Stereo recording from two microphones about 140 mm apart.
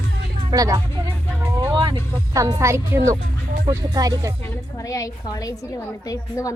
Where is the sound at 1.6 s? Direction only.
35° right (ahead or behind).